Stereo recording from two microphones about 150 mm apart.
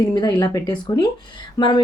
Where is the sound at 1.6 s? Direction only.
30° left (ahead or behind).